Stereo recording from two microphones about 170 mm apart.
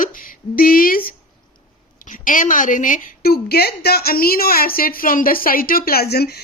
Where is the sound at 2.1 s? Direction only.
50° left (ahead or behind); by 6.4 s 70° left (ahead or behind).